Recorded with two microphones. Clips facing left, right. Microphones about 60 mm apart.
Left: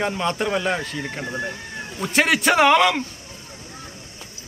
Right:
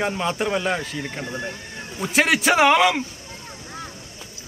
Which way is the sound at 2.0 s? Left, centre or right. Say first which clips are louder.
Even; centre.